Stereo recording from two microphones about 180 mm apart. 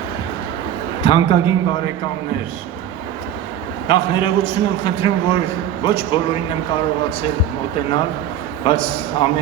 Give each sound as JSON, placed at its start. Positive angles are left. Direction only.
{"t": 1.0, "sound": "a man's voice", "side_deg": 30}
{"t": 3.8, "sound": "a man's voice", "side_deg": 30}
{"t": 8.6, "sound": "a man's voice", "side_deg": 30}